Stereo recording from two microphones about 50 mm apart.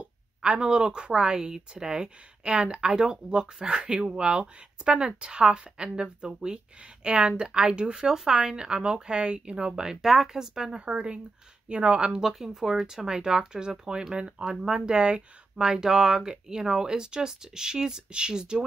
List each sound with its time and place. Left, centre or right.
0.0 s speech: centre
12.3 s speech: centre